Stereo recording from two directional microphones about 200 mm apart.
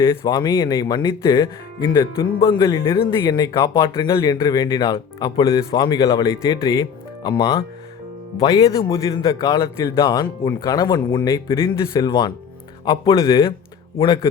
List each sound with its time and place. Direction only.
0.2 s speech: 20° left (ahead or behind)